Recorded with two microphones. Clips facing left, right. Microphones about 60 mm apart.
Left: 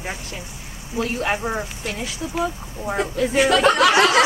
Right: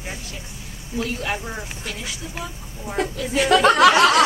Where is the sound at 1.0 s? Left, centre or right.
Left.